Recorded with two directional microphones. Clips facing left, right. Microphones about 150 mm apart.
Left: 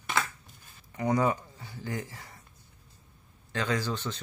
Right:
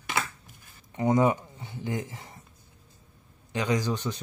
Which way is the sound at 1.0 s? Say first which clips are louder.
Right 4 dB; 20° right (ahead or behind).